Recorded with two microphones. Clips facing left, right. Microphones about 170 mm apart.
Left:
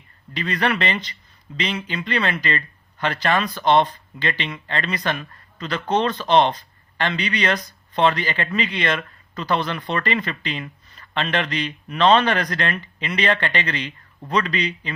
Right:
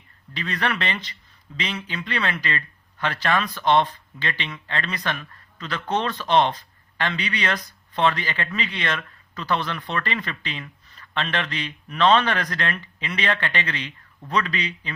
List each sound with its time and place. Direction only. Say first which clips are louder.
0.3 s speech: left 4 dB; centre (ahead or behind)
3.5 s speech: left 2 dB; 30° left (ahead or behind)
3.8 s speech: left 2 dB; centre (ahead or behind)